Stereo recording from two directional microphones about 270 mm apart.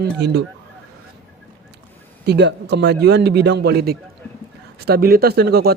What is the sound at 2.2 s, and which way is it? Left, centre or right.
A man's voice, right.